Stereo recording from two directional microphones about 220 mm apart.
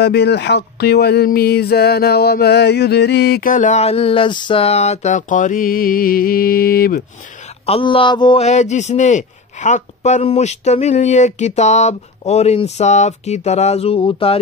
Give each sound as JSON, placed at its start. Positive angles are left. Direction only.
{"t": 0.0, "sound": "speech", "side_deg": 50}
{"t": 7.6, "sound": "a man's voice", "side_deg": 25}